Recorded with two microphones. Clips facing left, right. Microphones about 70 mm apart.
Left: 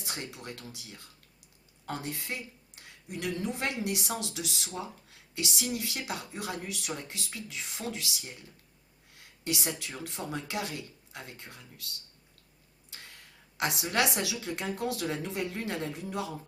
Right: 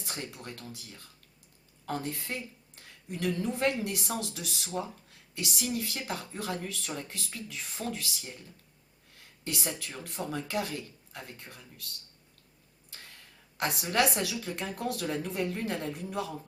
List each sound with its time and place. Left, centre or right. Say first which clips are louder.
0.0 s a woman's voice: even; centre
9.1 s a sound: left 3 dB; centre
9.8 s a woman's voice: right 1 dB; centre
12.9 s a woman's voice: left 1 dB; left